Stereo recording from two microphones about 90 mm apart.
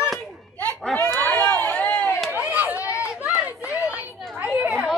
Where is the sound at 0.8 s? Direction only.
5° left (ahead or behind).